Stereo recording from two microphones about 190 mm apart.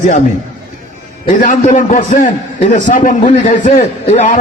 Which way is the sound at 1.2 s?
45° left (ahead or behind).